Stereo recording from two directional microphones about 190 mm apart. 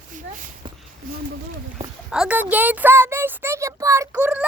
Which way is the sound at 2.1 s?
5° right (ahead or behind).